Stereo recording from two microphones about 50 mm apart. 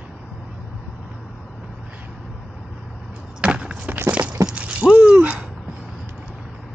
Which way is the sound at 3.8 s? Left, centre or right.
Right.